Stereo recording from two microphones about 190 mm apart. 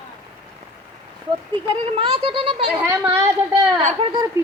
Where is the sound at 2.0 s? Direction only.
30° right (ahead or behind).